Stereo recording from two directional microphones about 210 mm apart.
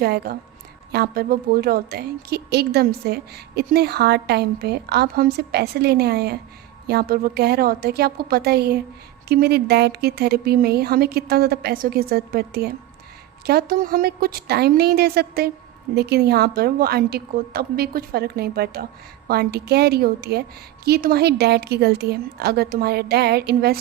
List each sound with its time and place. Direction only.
0.0 s a woman's voice: 50° right (ahead or behind)